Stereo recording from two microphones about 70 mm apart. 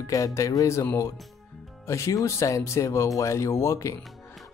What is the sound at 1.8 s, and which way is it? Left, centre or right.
Speech, left.